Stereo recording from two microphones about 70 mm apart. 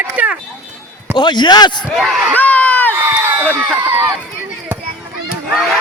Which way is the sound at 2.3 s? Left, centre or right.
Left.